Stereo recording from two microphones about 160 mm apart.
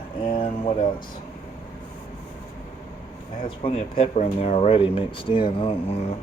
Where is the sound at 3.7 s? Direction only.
35° left (ahead or behind).